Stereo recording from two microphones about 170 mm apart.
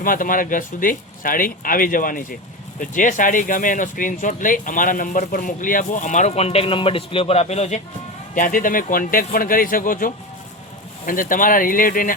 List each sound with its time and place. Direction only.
0.0 s speech: 55° left (ahead or behind)
8.4 s speech: 55° left (ahead or behind)